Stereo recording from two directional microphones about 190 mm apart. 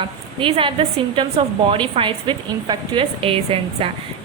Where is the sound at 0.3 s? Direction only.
25° right (ahead or behind).